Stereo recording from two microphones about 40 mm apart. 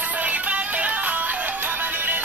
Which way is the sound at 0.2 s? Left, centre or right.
Right.